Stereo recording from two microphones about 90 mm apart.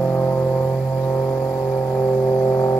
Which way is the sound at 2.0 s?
25° left (ahead or behind).